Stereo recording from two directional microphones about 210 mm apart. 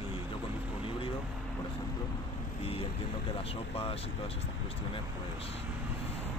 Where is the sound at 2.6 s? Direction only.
25° left (ahead or behind).